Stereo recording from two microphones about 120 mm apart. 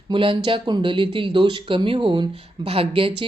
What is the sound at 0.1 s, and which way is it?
A woman's voice, 45° right (ahead or behind).